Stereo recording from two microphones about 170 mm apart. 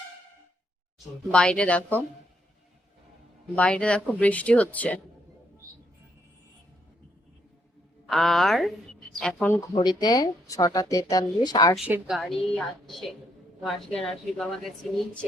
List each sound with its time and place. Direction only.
0.9 s speech: 5° left (ahead or behind)
3.5 s speech: 5° left (ahead or behind)
8.0 s a woman's voice: centre (ahead or behind)
10.0 s speech: 20° left (ahead or behind)
11.8 s a woman's voice: 5° right (ahead or behind)